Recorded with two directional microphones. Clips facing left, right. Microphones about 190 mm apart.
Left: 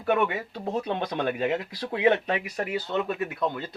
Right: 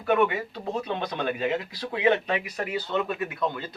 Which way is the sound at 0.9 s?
50° left (ahead or behind).